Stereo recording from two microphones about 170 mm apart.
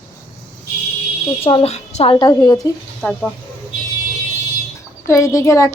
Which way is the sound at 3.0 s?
10° left (ahead or behind).